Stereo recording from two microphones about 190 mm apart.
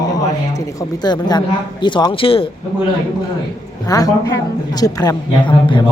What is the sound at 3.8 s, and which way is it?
A woman's voice, 20° left (ahead or behind).